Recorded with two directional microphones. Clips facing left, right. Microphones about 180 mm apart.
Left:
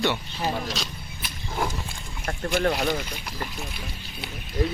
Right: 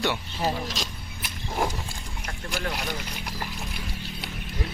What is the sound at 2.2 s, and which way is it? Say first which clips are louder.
Speech: left 8 dB; 50° left (ahead or behind).